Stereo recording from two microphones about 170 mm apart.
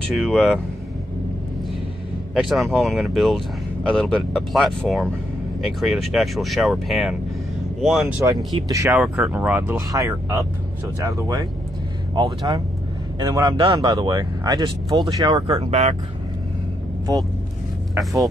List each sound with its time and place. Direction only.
0.1 s speech: centre (ahead or behind)
2.3 s speech: centre (ahead or behind)
8.6 s speech: 20° right (ahead or behind)
9.0 s speech: centre (ahead or behind); by 15.7 s 25° right (ahead or behind)
15.7 s speech: 40° right (ahead or behind)
17.1 s speech: 20° right (ahead or behind)